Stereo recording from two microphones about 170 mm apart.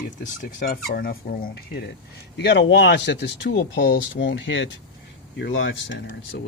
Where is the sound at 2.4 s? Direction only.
85° left.